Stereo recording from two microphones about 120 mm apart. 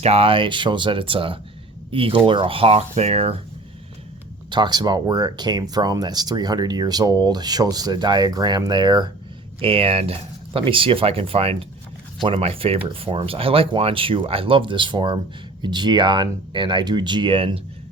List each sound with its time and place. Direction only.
0.0 s speech: 55° right (ahead or behind)
4.5 s speech: 35° right (ahead or behind)
9.6 s speech: 50° right (ahead or behind)